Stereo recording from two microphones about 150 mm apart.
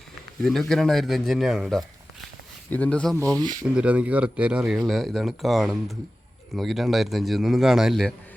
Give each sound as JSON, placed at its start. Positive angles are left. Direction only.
{"t": 0.4, "sound": "speech", "side_deg": 0}
{"t": 2.6, "sound": "speech", "side_deg": 10}
{"t": 3.2, "sound": "speech", "side_deg": -25}
{"t": 3.8, "sound": "speech", "side_deg": -10}